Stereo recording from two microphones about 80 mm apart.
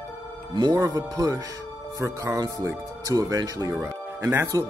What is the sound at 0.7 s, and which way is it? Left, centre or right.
Speech, right.